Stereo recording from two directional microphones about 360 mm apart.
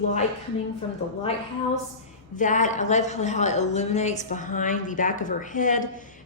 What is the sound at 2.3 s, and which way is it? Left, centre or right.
A woman's voice, left.